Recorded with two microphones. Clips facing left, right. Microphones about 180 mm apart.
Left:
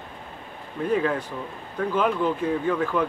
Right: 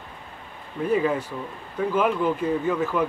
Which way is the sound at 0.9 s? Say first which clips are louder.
Right 1 dB; 10° right (ahead or behind).